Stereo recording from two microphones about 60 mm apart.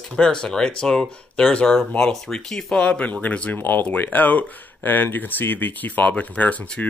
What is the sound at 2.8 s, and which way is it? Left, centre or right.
Speech, left.